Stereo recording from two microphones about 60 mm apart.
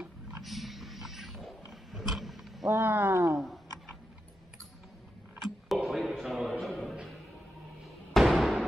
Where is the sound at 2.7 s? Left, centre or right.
Right.